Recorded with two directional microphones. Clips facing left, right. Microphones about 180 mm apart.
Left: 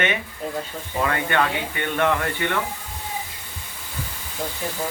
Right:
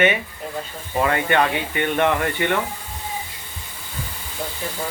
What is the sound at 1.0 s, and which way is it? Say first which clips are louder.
Speech: right 3 dB; 20° right (ahead or behind).